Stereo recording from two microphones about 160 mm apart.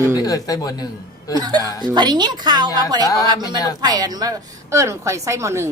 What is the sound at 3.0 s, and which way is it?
Speech, 20° left (ahead or behind).